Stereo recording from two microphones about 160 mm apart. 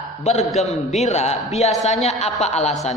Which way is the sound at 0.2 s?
45° left (ahead or behind).